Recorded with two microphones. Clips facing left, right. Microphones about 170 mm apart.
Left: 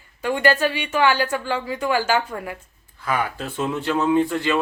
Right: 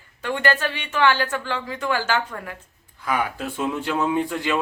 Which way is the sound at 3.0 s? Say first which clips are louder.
Even; 10° right (ahead or behind).